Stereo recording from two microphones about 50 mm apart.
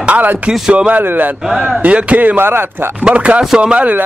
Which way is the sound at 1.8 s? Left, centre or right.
Right.